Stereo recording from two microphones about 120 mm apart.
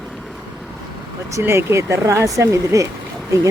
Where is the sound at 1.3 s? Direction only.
20° right (ahead or behind).